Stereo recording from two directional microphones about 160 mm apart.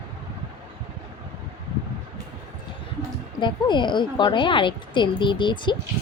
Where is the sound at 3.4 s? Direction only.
30° left (ahead or behind).